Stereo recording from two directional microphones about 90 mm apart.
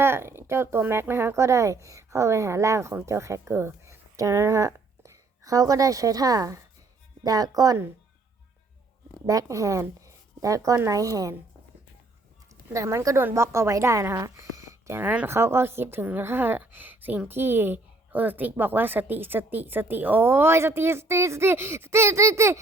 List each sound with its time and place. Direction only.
0.0 s speech: 25° right (ahead or behind); by 7.8 s 45° right (ahead or behind)
9.2 s speech: 40° right (ahead or behind)
12.7 s a woman's voice: 35° right (ahead or behind)